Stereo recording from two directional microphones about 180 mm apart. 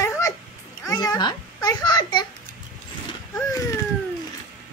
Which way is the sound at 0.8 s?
20° left (ahead or behind).